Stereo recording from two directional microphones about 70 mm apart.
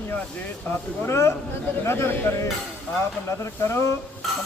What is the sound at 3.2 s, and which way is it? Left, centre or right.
Speech, left.